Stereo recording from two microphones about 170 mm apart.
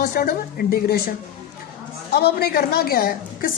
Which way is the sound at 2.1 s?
65° left (ahead or behind).